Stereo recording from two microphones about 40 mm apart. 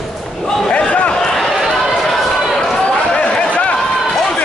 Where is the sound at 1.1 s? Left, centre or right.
Centre.